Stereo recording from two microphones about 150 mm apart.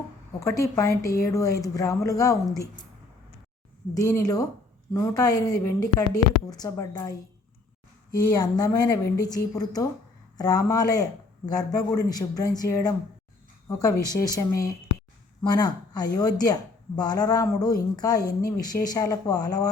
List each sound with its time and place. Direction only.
0.3 s a woman's voice: 20° left (ahead or behind)
3.9 s a woman's voice: 20° left (ahead or behind)